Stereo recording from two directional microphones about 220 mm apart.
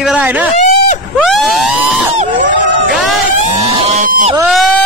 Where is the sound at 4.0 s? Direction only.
40° right (ahead or behind).